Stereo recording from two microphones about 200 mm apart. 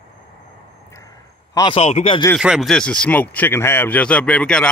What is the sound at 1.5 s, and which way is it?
Speech, 25° left (ahead or behind).